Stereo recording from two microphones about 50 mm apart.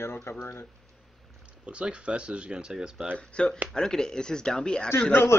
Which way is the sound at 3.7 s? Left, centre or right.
Centre.